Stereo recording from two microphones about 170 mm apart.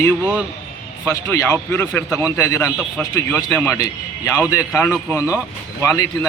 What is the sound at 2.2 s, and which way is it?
A man's voice, 20° left (ahead or behind).